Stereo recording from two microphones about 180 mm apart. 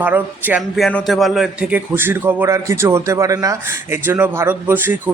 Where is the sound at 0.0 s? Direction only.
10° right (ahead or behind).